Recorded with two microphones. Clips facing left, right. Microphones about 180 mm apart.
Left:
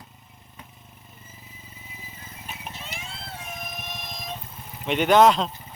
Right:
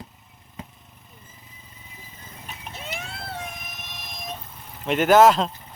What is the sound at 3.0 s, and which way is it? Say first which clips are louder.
Vehicle: right 5 dB; 70° right (ahead or behind).